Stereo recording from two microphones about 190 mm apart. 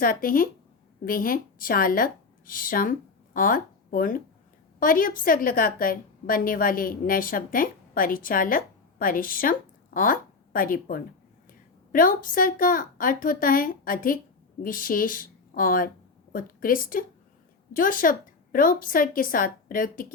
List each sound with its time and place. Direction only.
0.0 s a woman's voice: 50° left (ahead or behind)